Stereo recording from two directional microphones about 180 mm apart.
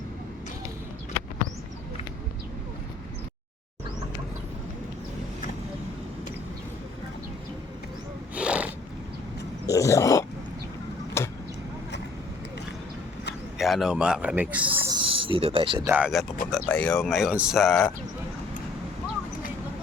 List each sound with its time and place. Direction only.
8.4 s cat: 5° right (ahead or behind)
9.6 s a sound: 15° left (ahead or behind)
13.6 s speech: centre (ahead or behind)
14.8 s speech: 25° right (ahead or behind)
15.8 s speech: 10° right (ahead or behind)
16.5 s speech: 5° left (ahead or behind)